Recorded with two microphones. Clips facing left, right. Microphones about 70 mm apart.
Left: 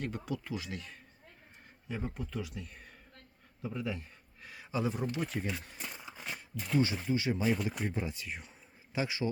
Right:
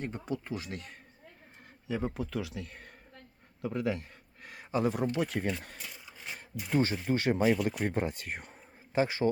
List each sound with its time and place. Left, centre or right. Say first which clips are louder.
0.0 s speech: right 2 dB; right
1.9 s speech: right 5 dB; right
3.6 s speech: right 5 dB; right
4.4 s a sound: right 4 dB; right
5.2 s speech: right 4 dB; right
6.7 s speech: right 2 dB; right